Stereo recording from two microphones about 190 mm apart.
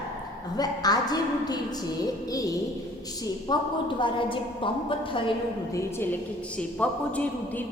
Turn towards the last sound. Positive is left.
turn(degrees=5)  # may be behind; listen again after turning